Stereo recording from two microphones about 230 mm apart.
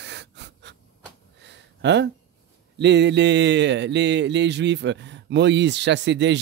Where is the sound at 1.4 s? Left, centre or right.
Right.